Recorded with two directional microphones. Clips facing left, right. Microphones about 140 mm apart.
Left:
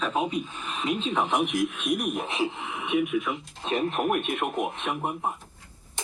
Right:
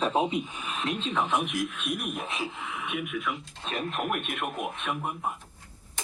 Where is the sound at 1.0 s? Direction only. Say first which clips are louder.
Left 2 dB; 15° left (ahead or behind).